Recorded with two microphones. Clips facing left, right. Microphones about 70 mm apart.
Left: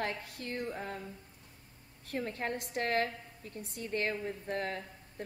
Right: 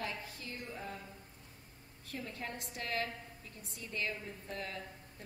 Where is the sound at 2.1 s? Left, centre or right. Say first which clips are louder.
Left 7 dB; left.